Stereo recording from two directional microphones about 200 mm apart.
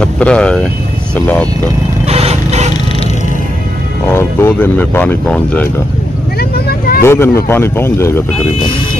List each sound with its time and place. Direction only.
0.0 s speech: 5° left (ahead or behind)
2.0 s vehicle: 30° right (ahead or behind)
4.1 s speech: 10° left (ahead or behind)
7.0 s speech: 15° left (ahead or behind)